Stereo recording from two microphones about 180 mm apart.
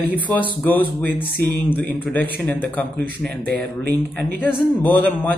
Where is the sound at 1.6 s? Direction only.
10° left (ahead or behind).